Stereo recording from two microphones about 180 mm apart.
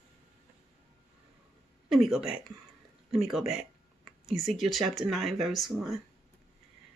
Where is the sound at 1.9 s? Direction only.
Centre (ahead or behind).